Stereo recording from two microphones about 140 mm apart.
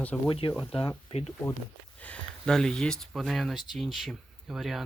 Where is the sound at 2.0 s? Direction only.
5° left (ahead or behind).